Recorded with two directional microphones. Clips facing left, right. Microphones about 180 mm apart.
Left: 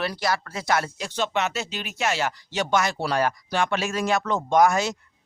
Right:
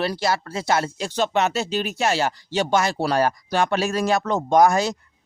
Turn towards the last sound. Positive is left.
turn(degrees=-35)  # may be behind; listen again after turning